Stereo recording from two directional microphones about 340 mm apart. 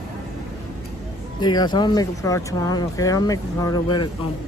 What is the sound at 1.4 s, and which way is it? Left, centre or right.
Speech, centre.